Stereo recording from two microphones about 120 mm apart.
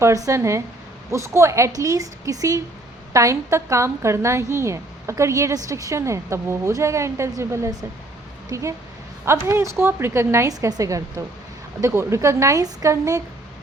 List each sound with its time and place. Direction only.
0.0 s a woman's voice: 25° right (ahead or behind)